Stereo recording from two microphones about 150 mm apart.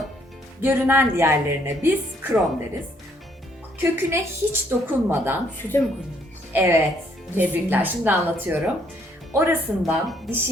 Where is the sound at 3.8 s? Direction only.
15° right (ahead or behind).